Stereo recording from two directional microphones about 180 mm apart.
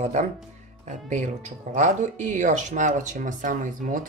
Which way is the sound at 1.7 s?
45° right (ahead or behind).